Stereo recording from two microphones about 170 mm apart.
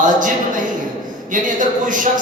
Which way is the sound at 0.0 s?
50° right (ahead or behind).